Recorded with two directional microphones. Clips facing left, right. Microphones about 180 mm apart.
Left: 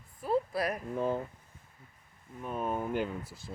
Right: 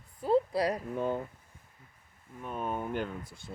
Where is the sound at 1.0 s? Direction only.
Centre (ahead or behind).